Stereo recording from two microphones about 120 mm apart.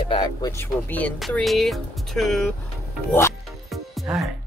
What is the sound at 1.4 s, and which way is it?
Speech, centre (ahead or behind).